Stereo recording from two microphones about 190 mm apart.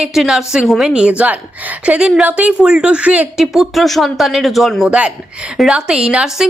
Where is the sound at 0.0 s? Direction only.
Centre (ahead or behind).